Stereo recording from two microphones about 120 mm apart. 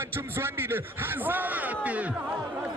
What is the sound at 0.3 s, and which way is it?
A man's voice, 20° right (ahead or behind).